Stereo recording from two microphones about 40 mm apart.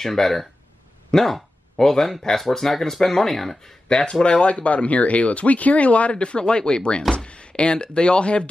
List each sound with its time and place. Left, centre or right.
0.0 s speech: centre
3.9 s speech: left
7.0 s speech: centre
7.2 s speech: left